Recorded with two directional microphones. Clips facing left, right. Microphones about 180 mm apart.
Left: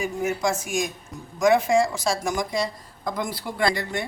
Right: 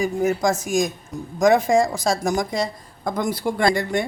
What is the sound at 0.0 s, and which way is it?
A woman's voice, 40° right (ahead or behind).